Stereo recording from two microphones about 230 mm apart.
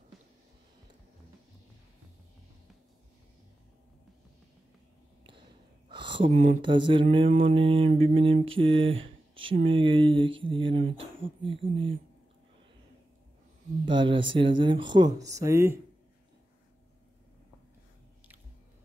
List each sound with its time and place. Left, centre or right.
0.1 s a sound: centre
5.9 s speech: right
13.8 s speech: right